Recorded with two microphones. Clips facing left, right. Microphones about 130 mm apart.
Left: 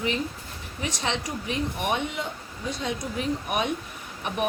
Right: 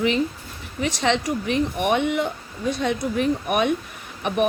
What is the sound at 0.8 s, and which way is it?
Speech, 80° right.